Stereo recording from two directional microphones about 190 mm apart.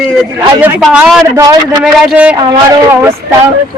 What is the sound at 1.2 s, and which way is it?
Speech, 20° right (ahead or behind).